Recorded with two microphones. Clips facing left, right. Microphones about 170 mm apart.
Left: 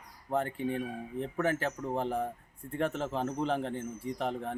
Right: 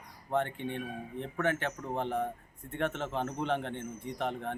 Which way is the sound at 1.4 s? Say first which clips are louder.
Even; 5° left (ahead or behind).